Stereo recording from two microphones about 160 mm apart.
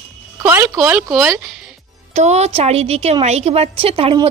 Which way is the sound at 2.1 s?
45° right (ahead or behind).